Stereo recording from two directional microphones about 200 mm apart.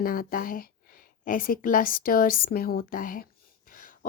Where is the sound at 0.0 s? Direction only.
45° left (ahead or behind).